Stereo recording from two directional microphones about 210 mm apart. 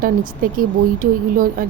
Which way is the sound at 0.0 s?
40° right (ahead or behind).